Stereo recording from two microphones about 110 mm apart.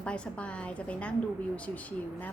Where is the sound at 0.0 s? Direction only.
10° left (ahead or behind).